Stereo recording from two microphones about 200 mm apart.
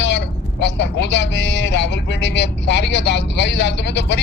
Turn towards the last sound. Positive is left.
turn(degrees=60)  # may be behind; listen again after turning